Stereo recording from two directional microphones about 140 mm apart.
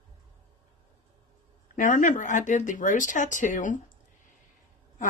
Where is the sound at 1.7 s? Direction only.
65° left (ahead or behind).